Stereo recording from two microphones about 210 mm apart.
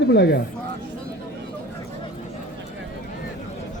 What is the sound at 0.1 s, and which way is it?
Speech, 55° left (ahead or behind).